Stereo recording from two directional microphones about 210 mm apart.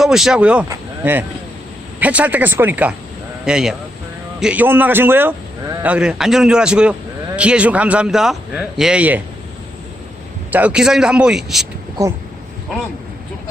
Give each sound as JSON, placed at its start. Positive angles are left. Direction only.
{"t": 0.0, "sound": "a man's voice", "side_deg": 0}
{"t": 10.5, "sound": "a man's voice", "side_deg": -5}